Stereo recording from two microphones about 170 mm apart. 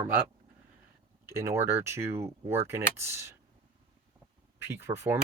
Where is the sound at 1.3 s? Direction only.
15° right (ahead or behind).